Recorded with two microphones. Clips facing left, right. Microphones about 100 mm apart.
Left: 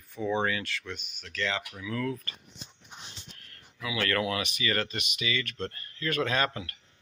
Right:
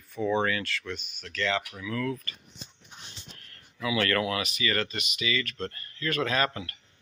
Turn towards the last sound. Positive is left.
turn(degrees=5)  # may be behind; listen again after turning